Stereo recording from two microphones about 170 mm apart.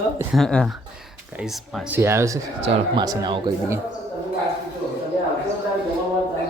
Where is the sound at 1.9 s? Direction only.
15° right (ahead or behind).